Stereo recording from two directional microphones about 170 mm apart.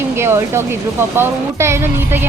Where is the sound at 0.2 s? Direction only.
15° right (ahead or behind).